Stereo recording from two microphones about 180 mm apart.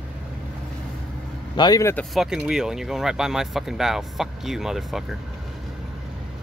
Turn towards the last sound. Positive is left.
turn(degrees=0)  # may be behind; listen again after turning